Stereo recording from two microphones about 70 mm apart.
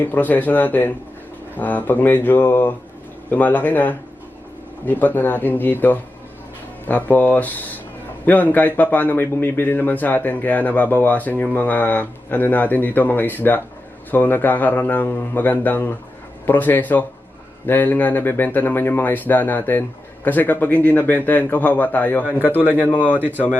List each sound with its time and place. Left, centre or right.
0.0 s a man's voice: left